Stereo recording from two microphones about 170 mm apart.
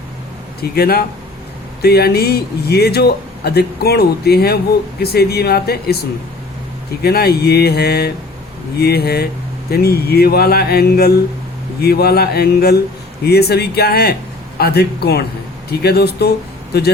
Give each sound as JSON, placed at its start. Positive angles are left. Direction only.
{"t": 0.6, "sound": "speech", "side_deg": 65}